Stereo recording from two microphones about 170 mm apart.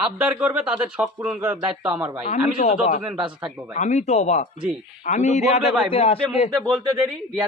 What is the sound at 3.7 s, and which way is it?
Speech, 40° left (ahead or behind).